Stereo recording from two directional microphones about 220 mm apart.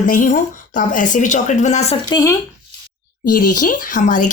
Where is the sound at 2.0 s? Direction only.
15° left (ahead or behind).